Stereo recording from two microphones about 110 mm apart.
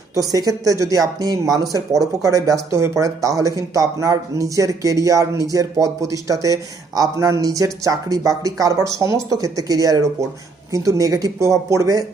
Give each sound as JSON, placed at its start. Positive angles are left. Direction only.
{"t": 0.2, "sound": "speech", "side_deg": -35}